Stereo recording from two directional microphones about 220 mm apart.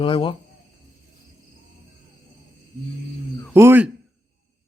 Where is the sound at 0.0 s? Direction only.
25° left (ahead or behind).